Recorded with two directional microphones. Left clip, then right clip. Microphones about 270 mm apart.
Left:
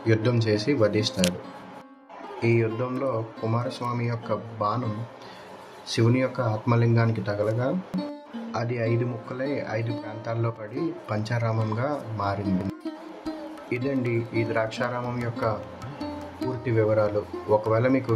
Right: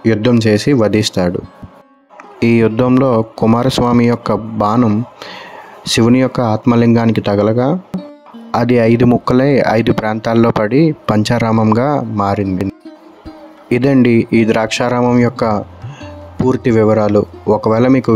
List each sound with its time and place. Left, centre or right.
0.0 s speech: right
2.4 s speech: right
5.9 s speech: right
7.9 s speech: centre
8.5 s speech: right
13.7 s speech: right